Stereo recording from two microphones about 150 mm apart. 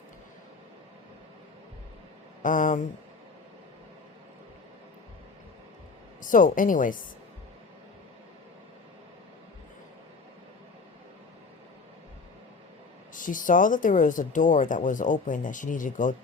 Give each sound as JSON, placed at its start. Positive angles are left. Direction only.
{"t": 2.4, "sound": "speech", "side_deg": 60}
{"t": 6.2, "sound": "speech", "side_deg": 60}
{"t": 13.1, "sound": "speech", "side_deg": 60}